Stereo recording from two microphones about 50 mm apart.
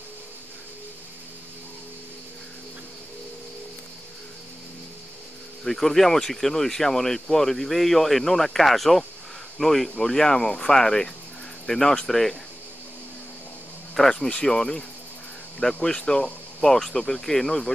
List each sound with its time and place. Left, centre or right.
5.6 s speech: centre
14.0 s speech: centre
15.8 s speech: centre
16.6 s speech: centre